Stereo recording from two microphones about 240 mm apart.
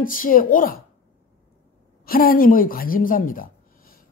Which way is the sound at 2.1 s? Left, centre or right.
Left.